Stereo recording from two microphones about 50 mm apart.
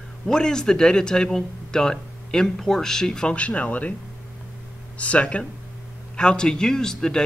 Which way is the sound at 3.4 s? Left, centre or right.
Left.